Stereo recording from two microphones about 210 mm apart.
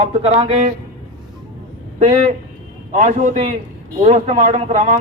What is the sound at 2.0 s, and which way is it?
A man's voice, 35° right (ahead or behind).